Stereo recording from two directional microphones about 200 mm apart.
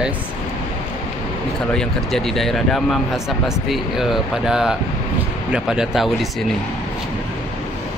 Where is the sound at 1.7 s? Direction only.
5° left (ahead or behind).